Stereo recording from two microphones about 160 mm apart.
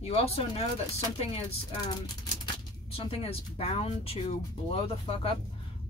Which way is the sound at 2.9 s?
35° left (ahead or behind).